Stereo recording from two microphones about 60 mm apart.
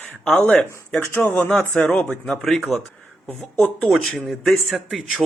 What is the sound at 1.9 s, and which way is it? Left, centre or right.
Speech, centre.